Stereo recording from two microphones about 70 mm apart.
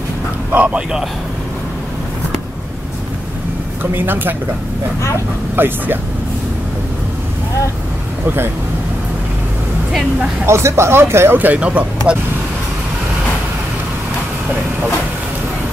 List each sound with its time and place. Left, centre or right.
0.7 s a man's voice: centre
3.8 s a woman's voice: right
5.6 s a woman's voice: right
10.4 s speech: right
11.3 s a woman's voice: right